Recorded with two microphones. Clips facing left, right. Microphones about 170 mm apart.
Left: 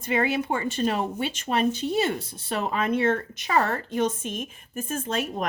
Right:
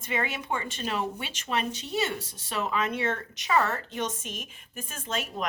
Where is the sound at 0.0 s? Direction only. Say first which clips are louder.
Left 7 dB; 50° left (ahead or behind).